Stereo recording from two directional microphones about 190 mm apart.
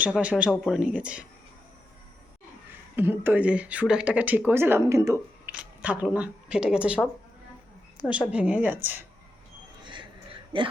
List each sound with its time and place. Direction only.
0.0 s speech: 5° right (ahead or behind)
2.9 s speech: 10° right (ahead or behind)
8.3 s speech: 5° right (ahead or behind)
9.8 s a sound: 25° right (ahead or behind)